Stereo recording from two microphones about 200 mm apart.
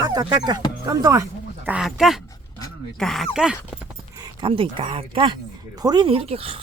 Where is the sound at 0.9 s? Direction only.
15° right (ahead or behind).